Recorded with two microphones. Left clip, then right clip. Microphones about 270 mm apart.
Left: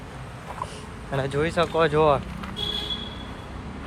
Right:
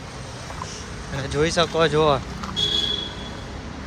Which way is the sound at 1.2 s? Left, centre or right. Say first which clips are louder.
Right 3 dB; centre.